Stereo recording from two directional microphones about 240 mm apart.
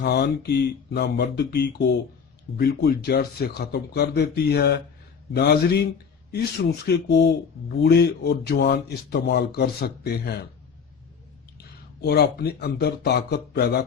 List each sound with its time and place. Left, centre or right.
0.0 s speech: left
12.0 s speech: left